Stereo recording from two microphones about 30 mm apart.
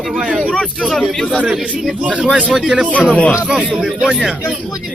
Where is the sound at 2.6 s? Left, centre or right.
Right.